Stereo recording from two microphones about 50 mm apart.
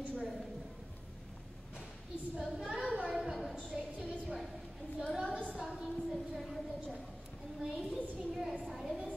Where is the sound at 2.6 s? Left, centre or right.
Centre.